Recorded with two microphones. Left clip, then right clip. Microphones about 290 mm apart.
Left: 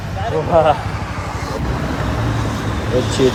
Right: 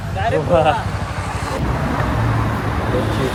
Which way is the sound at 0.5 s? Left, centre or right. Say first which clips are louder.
Left 3 dB; centre.